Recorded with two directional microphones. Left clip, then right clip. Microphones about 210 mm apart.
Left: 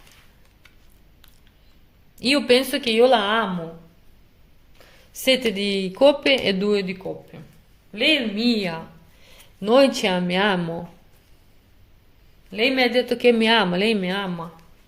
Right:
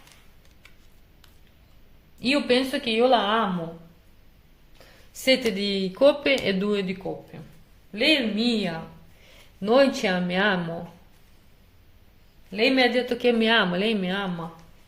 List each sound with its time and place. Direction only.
2.1 s a woman's voice: 45° left (ahead or behind)
5.1 s speech: 30° left (ahead or behind)
12.5 s speech: 20° left (ahead or behind)